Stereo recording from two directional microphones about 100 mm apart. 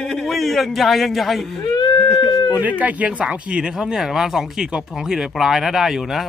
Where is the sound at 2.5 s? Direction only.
15° right (ahead or behind).